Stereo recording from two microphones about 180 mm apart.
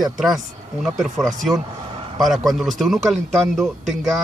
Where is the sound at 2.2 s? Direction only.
Centre (ahead or behind).